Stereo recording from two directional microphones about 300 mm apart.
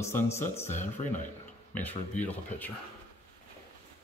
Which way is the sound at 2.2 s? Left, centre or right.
Centre.